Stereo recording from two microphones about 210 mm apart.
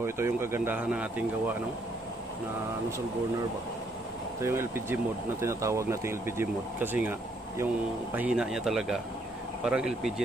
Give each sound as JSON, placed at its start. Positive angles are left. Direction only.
{"t": 0.0, "sound": "speech", "side_deg": -10}
{"t": 4.4, "sound": "speech", "side_deg": -10}